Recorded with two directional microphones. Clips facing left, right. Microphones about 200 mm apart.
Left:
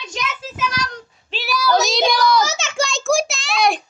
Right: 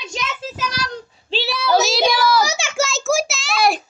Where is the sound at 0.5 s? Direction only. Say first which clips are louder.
Left 1 dB; 35° right (ahead or behind).